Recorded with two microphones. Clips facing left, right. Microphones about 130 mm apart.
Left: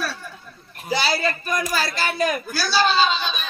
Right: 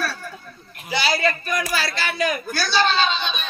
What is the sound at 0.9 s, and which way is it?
Speech, 35° left (ahead or behind).